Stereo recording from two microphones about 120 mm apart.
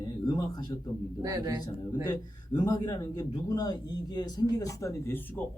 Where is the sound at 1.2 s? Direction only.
30° right (ahead or behind).